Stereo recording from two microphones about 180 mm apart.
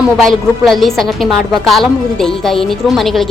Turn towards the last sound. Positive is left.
turn(degrees=0)  # may be behind; listen again after turning